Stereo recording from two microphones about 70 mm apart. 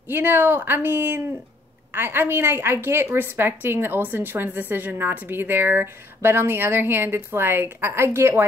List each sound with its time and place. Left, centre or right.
0.1 s a woman's voice: right